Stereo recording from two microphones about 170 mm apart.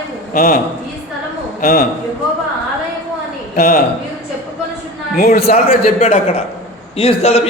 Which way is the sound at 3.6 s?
65° left (ahead or behind).